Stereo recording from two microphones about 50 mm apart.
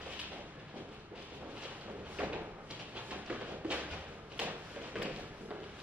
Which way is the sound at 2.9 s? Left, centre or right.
Right.